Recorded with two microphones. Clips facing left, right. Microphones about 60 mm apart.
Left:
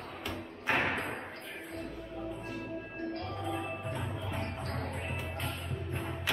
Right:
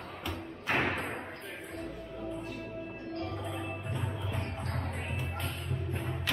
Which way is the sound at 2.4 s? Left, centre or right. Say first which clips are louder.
Even; left.